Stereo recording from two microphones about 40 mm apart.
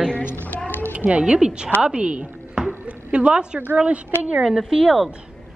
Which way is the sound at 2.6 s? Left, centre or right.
Right.